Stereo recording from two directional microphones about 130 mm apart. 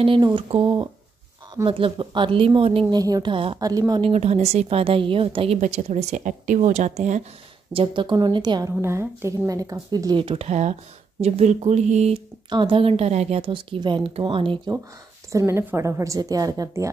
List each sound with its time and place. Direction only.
0.2 s speech: 40° right (ahead or behind)
2.9 s speech: 30° right (ahead or behind)
3.5 s a woman's voice: 25° right (ahead or behind)
4.0 s speech: 55° right (ahead or behind)
5.6 s a woman's voice: 65° right (ahead or behind)
7.7 s speech: 40° right (ahead or behind)
8.8 s speech: 20° right (ahead or behind); by 12.2 s 55° right (ahead or behind)
12.4 s speech: 40° right (ahead or behind); by 13.5 s 55° right (ahead or behind)
13.5 s speech: 40° right (ahead or behind)
15.3 s a woman's voice: 20° right (ahead or behind)